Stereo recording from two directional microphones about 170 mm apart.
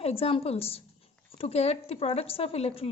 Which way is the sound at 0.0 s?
35° left (ahead or behind).